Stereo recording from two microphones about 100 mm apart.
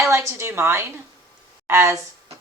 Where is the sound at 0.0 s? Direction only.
30° right (ahead or behind).